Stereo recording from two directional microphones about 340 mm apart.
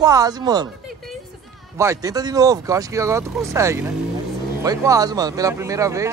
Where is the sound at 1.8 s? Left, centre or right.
Centre.